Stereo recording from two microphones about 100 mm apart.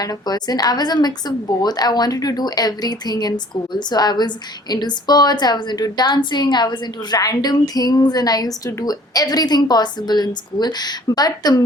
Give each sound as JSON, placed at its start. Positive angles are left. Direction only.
{"t": 0.0, "sound": "a woman's voice", "side_deg": 40}